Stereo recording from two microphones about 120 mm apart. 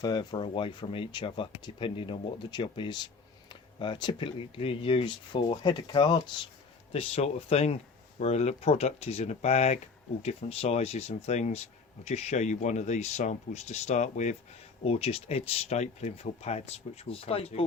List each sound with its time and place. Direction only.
0.0 s speech: 35° left (ahead or behind)
6.9 s speech: 55° left (ahead or behind); by 14.3 s 75° left (ahead or behind)
14.8 s speech: 55° left (ahead or behind)